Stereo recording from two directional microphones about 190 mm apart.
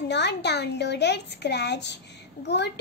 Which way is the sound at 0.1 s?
65° left (ahead or behind).